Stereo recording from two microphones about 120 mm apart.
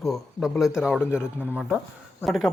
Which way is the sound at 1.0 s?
20° left (ahead or behind).